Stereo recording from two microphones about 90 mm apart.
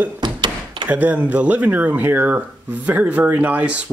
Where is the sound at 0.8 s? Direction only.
20° right (ahead or behind).